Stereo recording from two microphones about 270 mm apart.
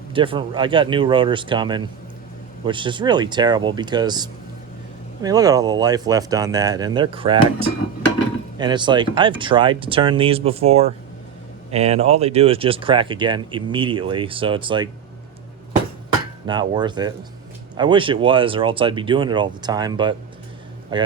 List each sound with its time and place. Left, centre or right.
0.1 s speech: centre
16.5 s a man's voice: centre